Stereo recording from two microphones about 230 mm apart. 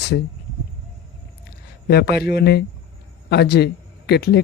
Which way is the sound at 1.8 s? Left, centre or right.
Left.